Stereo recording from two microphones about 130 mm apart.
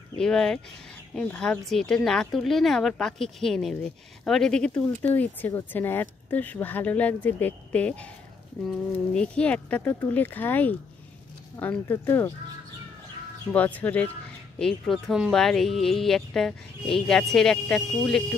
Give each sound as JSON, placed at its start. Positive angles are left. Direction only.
{"t": 0.2, "sound": "speech", "side_deg": 5}
{"t": 13.5, "sound": "speech", "side_deg": 10}